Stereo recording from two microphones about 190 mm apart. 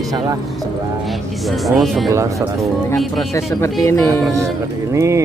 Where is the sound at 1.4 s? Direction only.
Centre (ahead or behind).